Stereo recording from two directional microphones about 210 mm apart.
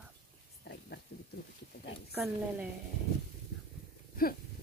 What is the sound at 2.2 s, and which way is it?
Speech, 5° right (ahead or behind).